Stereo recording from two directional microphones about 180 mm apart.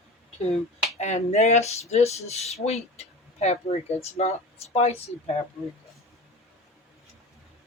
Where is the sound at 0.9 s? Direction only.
40° left (ahead or behind).